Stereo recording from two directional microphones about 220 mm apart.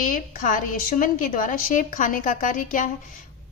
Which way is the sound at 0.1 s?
35° left (ahead or behind).